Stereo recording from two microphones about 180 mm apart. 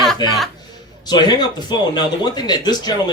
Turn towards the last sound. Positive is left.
turn(degrees=20)  # may be behind; listen again after turning